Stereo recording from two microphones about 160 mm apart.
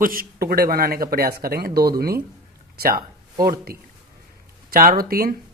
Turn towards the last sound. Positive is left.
turn(degrees=-70)  # may be behind; listen again after turning